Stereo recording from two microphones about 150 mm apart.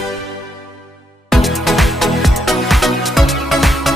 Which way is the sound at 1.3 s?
Centre (ahead or behind).